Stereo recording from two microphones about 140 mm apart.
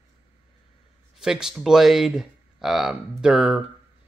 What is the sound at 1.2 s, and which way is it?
Speech, 5° right (ahead or behind).